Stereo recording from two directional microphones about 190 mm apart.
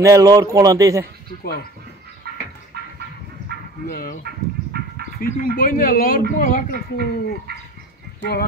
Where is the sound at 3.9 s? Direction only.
50° left (ahead or behind).